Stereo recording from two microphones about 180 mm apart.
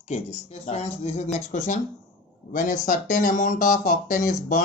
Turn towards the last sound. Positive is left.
turn(degrees=45)  # may be behind; listen again after turning